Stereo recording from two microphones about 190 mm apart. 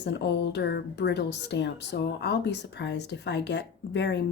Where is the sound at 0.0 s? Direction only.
65° left (ahead or behind).